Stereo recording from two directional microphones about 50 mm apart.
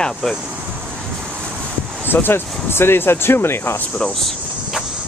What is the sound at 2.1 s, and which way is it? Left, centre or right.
Speech, left.